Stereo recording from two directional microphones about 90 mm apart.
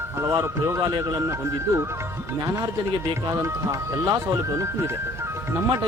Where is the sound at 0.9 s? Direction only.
45° right (ahead or behind).